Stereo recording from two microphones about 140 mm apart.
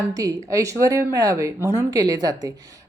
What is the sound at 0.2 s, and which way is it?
A woman's voice, 25° right (ahead or behind).